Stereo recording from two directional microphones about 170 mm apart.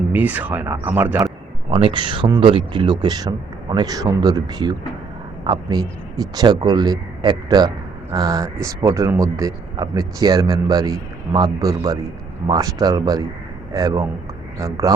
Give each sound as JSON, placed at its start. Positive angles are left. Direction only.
{"t": 0.1, "sound": "speech", "side_deg": -10}
{"t": 1.7, "sound": "speech", "side_deg": -30}